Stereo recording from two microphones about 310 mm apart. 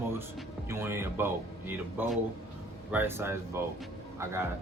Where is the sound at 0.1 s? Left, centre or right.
Centre.